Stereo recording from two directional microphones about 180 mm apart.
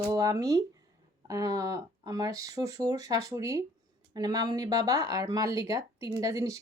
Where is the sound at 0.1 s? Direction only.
20° right (ahead or behind).